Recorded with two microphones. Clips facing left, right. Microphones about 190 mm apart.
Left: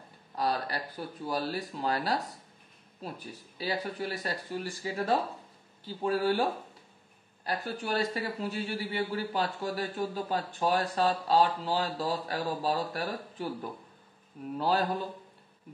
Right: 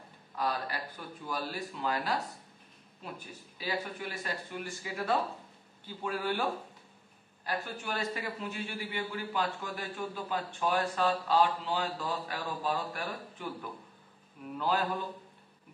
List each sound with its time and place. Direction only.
0.4 s a man's voice: 35° left (ahead or behind)